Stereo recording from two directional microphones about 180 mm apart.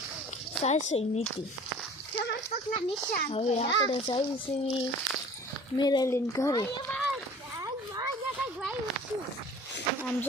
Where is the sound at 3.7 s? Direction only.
90° left.